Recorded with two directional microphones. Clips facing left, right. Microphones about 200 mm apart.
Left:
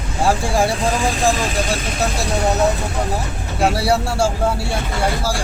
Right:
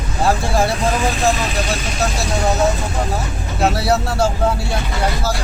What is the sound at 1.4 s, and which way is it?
Speech, 40° left (ahead or behind).